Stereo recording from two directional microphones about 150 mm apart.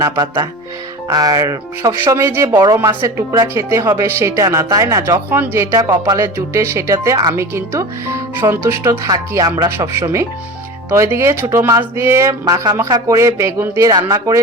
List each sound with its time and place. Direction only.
0.0 s speech: 20° right (ahead or behind)